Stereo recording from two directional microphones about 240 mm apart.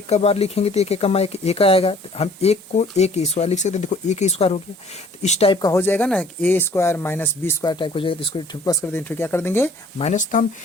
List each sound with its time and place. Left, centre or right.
0.1 s speech: left; by 9.7 s centre
10.0 s speech: left